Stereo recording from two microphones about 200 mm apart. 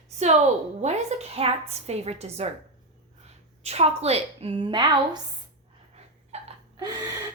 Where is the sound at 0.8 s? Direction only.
35° right (ahead or behind).